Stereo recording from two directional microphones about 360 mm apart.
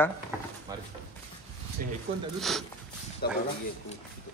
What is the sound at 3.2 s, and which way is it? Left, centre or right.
Speech, left.